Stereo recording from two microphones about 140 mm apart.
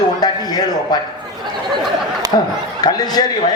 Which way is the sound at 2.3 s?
35° left (ahead or behind).